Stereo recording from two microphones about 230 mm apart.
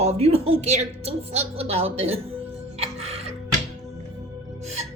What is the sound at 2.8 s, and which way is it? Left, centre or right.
Music, right.